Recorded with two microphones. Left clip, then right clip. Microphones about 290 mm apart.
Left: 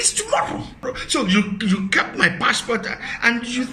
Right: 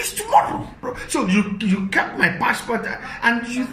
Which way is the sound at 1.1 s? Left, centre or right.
Left.